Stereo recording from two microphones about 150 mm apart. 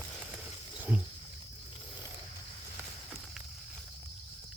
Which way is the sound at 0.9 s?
10° right (ahead or behind).